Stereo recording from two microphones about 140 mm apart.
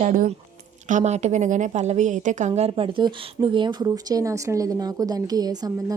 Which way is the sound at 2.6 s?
45° right (ahead or behind).